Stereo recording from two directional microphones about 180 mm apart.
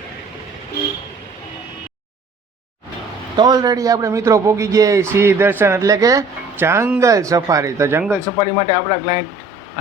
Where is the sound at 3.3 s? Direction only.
20° right (ahead or behind).